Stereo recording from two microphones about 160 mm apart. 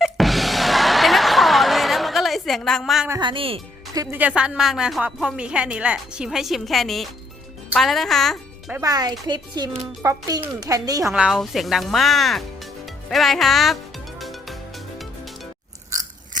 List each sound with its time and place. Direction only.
0.0 s music: centre (ahead or behind)
3.1 s speech: 30° right (ahead or behind)
3.9 s speech: 20° right (ahead or behind)
4.2 s a woman's voice: 5° right (ahead or behind)
8.8 s speech: 25° right (ahead or behind)
11.0 s a woman's voice: 5° right (ahead or behind)
14.2 s music: centre (ahead or behind)